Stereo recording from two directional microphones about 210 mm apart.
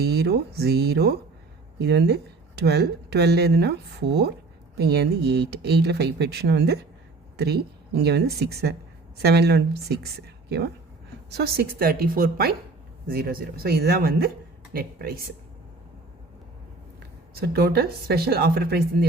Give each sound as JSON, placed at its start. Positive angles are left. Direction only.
{"t": 0.0, "sound": "speech", "side_deg": -50}
{"t": 17.4, "sound": "speech", "side_deg": -45}